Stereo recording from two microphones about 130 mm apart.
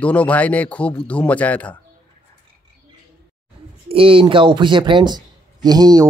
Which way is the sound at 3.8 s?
45° right (ahead or behind).